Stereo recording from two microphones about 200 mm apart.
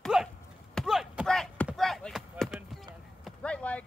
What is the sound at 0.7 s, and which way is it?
Chop, centre (ahead or behind).